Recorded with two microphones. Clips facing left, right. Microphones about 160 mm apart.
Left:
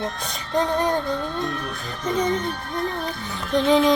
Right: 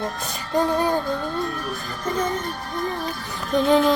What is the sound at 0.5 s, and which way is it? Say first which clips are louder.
Music: right 1 dB; 5° right (ahead or behind).